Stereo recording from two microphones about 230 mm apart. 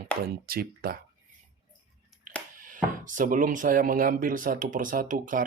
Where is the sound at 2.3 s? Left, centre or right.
Right.